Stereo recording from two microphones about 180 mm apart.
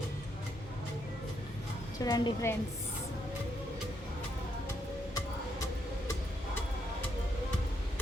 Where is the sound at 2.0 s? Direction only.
20° left (ahead or behind).